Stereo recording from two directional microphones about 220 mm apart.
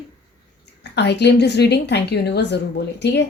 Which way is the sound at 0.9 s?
50° left (ahead or behind).